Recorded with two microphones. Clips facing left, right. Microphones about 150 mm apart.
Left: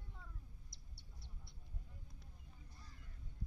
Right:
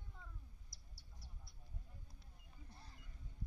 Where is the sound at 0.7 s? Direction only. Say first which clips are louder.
Left 2 dB; 25° left (ahead or behind).